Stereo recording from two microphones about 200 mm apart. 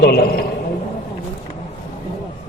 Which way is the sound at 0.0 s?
50° left (ahead or behind).